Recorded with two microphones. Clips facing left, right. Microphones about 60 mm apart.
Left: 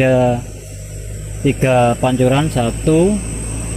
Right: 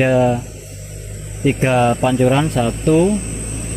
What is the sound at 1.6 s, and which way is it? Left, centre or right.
Speech, centre.